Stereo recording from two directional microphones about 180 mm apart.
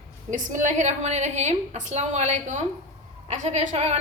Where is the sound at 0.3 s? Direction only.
45° right (ahead or behind).